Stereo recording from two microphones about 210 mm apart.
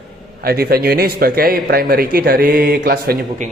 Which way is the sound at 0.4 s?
45° right (ahead or behind).